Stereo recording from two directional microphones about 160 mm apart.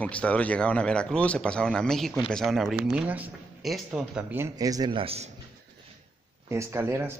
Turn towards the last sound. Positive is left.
turn(degrees=-15)  # may be behind; listen again after turning